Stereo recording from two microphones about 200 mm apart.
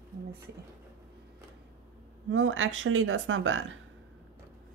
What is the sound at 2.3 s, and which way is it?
Speech, 75° right (ahead or behind).